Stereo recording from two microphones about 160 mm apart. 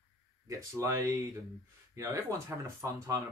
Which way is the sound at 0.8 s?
15° right (ahead or behind).